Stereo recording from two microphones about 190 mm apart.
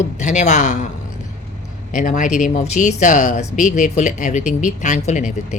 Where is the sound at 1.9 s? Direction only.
45° left (ahead or behind).